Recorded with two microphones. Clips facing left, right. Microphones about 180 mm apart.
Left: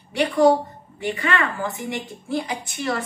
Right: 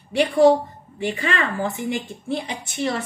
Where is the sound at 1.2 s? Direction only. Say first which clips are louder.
Even; 30° right (ahead or behind).